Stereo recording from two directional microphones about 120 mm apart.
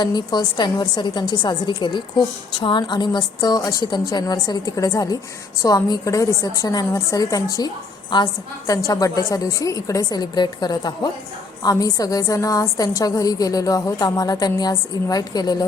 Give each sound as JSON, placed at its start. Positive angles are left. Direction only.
{"t": 0.0, "sound": "a woman's voice", "side_deg": 35}